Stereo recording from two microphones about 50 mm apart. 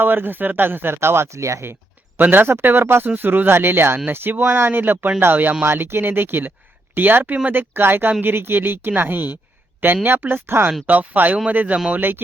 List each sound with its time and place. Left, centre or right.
0.0 s speech: right
0.9 s speech: right
2.1 s speech: right
10.8 s speech: right